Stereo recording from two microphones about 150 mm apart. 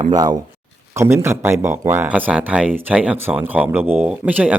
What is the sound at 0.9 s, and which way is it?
Speech, 15° right (ahead or behind).